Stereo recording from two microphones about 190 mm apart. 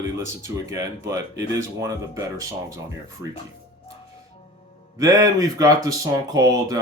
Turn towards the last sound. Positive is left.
turn(degrees=-20)  # may be behind; listen again after turning